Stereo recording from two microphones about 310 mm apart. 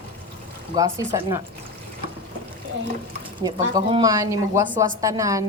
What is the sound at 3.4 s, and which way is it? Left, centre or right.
A woman's voice, centre.